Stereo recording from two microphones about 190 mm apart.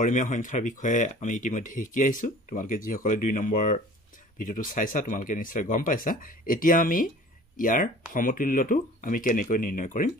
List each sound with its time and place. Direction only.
0.0 s speech: 40° left (ahead or behind)